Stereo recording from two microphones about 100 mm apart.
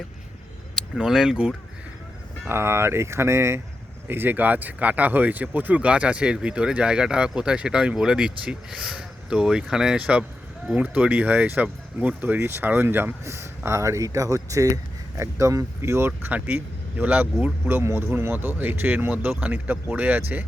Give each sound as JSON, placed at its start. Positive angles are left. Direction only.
{"t": 0.8, "sound": "speech", "side_deg": -5}
{"t": 2.4, "sound": "speech", "side_deg": -25}